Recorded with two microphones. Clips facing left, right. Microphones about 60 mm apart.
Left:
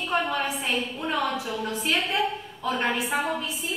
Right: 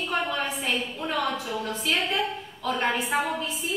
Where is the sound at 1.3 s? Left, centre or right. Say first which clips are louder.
Left 1 dB; centre.